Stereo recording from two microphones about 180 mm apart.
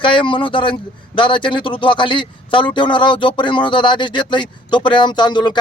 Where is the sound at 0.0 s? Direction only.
25° left (ahead or behind).